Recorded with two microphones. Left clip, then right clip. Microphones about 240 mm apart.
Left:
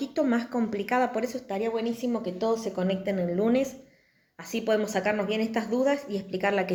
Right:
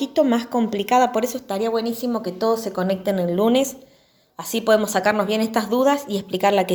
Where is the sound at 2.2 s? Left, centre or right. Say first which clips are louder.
Right 7 dB; right.